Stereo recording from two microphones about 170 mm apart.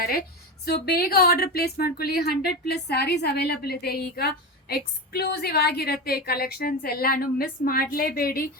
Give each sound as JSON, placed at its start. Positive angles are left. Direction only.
{"t": 0.1, "sound": "a woman's voice", "side_deg": 60}